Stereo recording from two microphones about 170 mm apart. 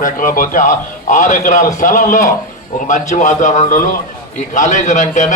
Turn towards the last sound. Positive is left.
turn(degrees=45)  # may be behind; listen again after turning